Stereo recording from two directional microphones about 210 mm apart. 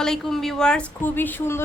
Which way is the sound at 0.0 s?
Centre (ahead or behind).